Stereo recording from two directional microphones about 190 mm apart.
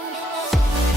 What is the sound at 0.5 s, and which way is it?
Music, centre (ahead or behind).